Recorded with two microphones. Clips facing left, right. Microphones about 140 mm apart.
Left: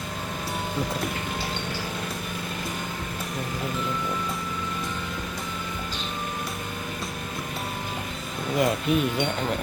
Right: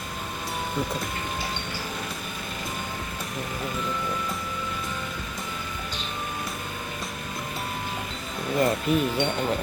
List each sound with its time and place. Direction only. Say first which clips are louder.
8.5 s speech: even; 5° left (ahead or behind)